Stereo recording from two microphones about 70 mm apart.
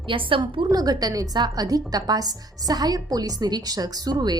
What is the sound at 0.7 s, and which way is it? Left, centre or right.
Speech, right.